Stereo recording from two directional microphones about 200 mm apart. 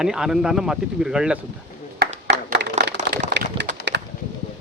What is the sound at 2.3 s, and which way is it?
Clapping, 55° right (ahead or behind).